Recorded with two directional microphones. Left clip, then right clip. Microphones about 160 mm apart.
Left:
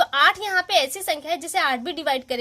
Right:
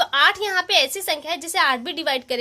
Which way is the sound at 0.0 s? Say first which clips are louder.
Even; 25° left (ahead or behind).